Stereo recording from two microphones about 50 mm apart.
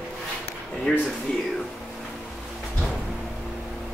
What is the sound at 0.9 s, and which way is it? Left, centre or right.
Speech, left.